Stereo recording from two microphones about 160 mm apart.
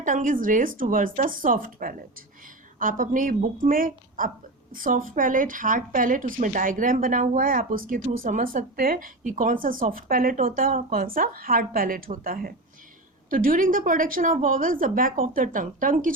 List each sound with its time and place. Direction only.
0.0 s a woman's voice: 55° right (ahead or behind)